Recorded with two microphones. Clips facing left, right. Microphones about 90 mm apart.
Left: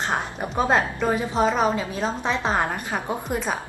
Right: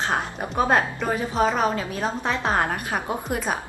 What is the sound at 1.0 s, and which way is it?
Speech, 20° left (ahead or behind).